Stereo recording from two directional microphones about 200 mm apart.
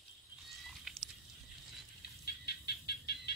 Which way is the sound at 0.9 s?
Centre (ahead or behind).